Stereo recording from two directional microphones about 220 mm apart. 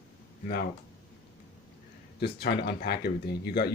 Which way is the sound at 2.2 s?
50° left (ahead or behind).